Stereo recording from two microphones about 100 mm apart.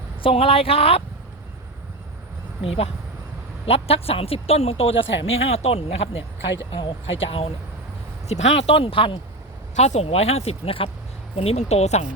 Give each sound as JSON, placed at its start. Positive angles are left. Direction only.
{"t": 0.2, "sound": "speech", "side_deg": 70}
{"t": 2.6, "sound": "speech", "side_deg": 90}
{"t": 3.7, "sound": "speech", "side_deg": 80}
{"t": 5.4, "sound": "speech", "side_deg": 90}
{"t": 6.7, "sound": "speech", "side_deg": 60}
{"t": 8.3, "sound": "speech", "side_deg": 90}
{"t": 9.8, "sound": "speech", "side_deg": 90}
{"t": 11.3, "sound": "speech", "side_deg": 90}